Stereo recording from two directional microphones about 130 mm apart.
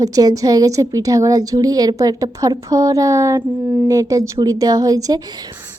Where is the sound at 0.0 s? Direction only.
30° right (ahead or behind).